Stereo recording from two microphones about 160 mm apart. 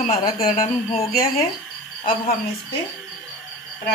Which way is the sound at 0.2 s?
40° left (ahead or behind).